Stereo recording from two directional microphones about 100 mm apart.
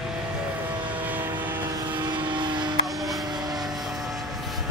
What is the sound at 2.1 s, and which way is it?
Vehicle, 50° right (ahead or behind).